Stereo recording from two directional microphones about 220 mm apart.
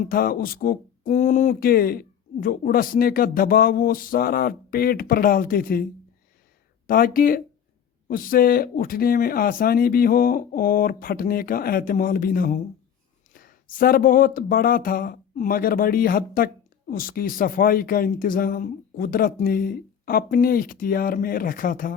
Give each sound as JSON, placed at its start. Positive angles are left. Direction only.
{"t": 0.0, "sound": "speech", "side_deg": 40}